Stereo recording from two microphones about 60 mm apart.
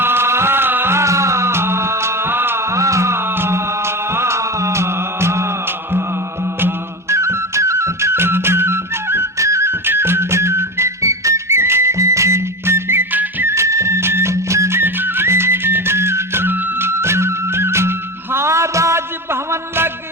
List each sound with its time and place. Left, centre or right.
0.0 s music: right
3.3 s music: right
6.6 s music: right
9.4 s music: right
14.8 s music: right